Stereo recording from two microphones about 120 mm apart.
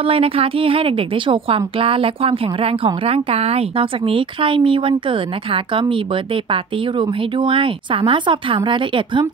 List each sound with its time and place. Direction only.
0.0 s a woman's voice: 50° right (ahead or behind)